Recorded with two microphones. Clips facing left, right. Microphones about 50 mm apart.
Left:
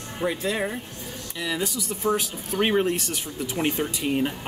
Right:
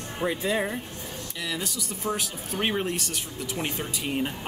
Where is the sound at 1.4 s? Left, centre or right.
Centre.